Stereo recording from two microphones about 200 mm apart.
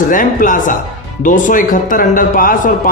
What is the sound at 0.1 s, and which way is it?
A man's voice, 40° left (ahead or behind).